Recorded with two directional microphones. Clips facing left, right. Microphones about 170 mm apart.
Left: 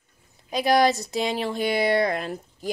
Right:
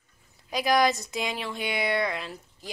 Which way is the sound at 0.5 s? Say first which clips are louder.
Left 3 dB; 30° left (ahead or behind).